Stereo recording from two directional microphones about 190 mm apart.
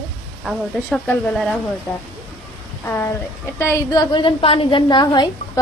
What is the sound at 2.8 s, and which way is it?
A woman's voice, 10° left (ahead or behind).